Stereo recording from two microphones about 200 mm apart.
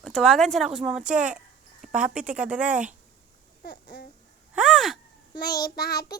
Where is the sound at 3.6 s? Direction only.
45° left (ahead or behind).